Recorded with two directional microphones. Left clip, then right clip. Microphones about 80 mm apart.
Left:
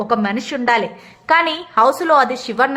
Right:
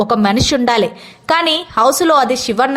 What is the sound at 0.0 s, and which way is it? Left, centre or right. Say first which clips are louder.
A woman's voice: right 5 dB; right.